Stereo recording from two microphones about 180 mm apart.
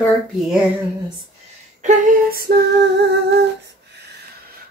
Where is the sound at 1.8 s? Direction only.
45° right (ahead or behind).